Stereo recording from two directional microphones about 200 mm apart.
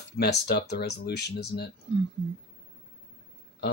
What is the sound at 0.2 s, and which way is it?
Speech, 55° left (ahead or behind).